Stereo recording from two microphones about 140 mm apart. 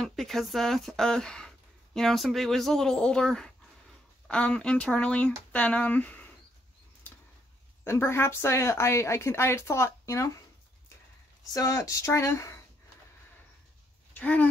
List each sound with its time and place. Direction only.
0.0 s speech: centre (ahead or behind)
7.8 s a woman's voice: 20° left (ahead or behind)
11.5 s a woman's voice: 25° left (ahead or behind)
14.1 s speech: 10° left (ahead or behind)